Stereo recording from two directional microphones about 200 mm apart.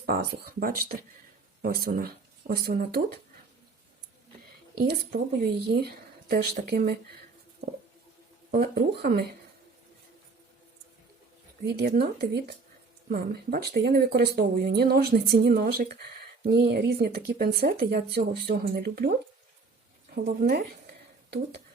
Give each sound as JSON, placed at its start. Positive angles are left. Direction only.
{"t": 0.0, "sound": "speech", "side_deg": -50}
{"t": 4.8, "sound": "speech", "side_deg": -50}
{"t": 8.5, "sound": "speech", "side_deg": -50}
{"t": 11.6, "sound": "speech", "side_deg": -55}
{"t": 20.1, "sound": "speech", "side_deg": -50}